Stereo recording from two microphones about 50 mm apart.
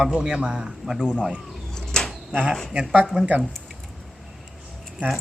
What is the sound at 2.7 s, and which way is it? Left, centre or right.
Speech, right.